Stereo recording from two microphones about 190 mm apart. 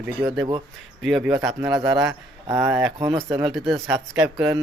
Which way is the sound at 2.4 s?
15° right (ahead or behind).